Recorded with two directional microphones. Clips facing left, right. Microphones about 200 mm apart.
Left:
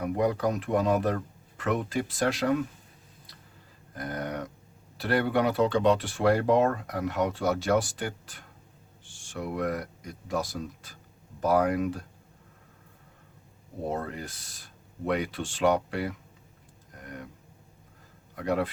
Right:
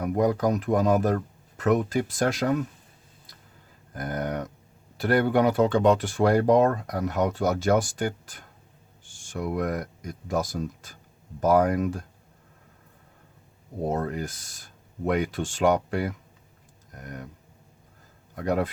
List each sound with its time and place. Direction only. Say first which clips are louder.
0.0 s speech: right 3 dB; 45° right (ahead or behind)
3.9 s speech: right 4 dB; 45° right (ahead or behind)
13.9 s speech: right 5 dB; 45° right (ahead or behind)
18.4 s speech: right 2 dB; 45° right (ahead or behind)